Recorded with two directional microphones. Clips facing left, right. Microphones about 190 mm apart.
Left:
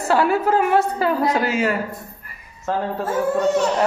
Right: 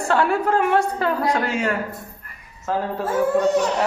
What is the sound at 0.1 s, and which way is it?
Speech, 5° left (ahead or behind).